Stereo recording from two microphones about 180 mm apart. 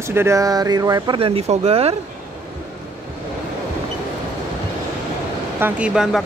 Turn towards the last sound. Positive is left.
turn(degrees=-5)  # may be behind; listen again after turning